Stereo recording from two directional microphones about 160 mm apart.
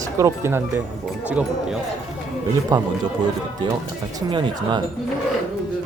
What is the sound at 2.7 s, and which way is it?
Speech, 20° right (ahead or behind).